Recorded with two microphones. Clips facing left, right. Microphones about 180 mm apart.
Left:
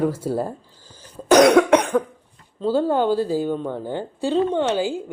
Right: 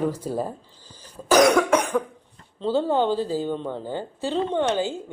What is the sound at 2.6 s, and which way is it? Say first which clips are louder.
Mantra: left 2 dB; 10° left (ahead or behind).